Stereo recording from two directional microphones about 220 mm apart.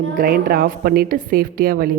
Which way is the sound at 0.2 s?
40° right (ahead or behind).